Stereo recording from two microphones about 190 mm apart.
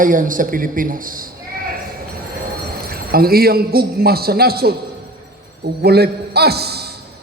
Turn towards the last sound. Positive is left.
turn(degrees=-55)  # may be behind; listen again after turning